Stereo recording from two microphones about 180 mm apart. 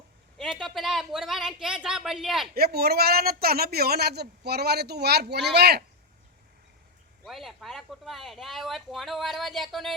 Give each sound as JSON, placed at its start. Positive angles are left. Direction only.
{"t": 0.3, "sound": "speech", "side_deg": 0}
{"t": 2.6, "sound": "a man's voice", "side_deg": -60}
{"t": 7.3, "sound": "speech", "side_deg": 0}